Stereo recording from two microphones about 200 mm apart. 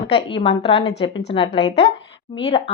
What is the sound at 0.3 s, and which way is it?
A woman's voice, 25° left (ahead or behind).